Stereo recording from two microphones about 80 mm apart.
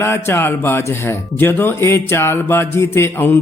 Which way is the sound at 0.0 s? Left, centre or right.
Left.